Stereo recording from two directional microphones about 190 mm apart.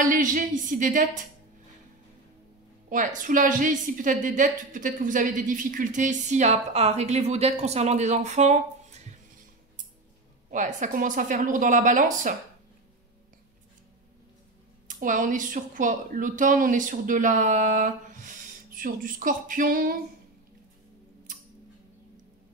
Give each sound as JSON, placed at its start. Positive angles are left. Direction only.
{"t": 0.0, "sound": "speech", "side_deg": -45}
{"t": 2.9, "sound": "a woman's voice", "side_deg": -45}
{"t": 10.5, "sound": "speech", "side_deg": -40}
{"t": 14.9, "sound": "speech", "side_deg": -45}